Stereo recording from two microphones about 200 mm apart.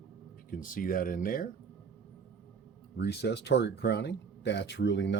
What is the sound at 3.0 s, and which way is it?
Speech, 55° left (ahead or behind).